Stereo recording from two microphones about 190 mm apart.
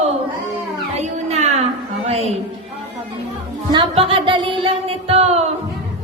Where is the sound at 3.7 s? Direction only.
30° right (ahead or behind).